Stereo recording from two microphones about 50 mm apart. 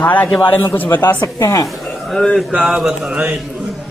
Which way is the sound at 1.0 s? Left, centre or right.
Left.